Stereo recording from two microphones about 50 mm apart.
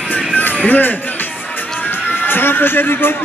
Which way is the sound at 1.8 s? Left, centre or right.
Left.